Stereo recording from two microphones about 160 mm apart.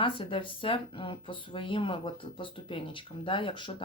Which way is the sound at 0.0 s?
35° left (ahead or behind).